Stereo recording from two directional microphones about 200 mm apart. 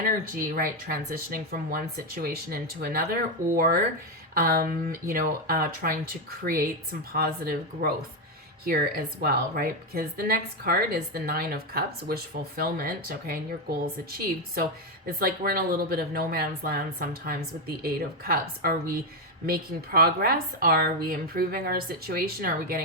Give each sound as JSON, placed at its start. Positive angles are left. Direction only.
{"t": 0.0, "sound": "a woman's voice", "side_deg": -45}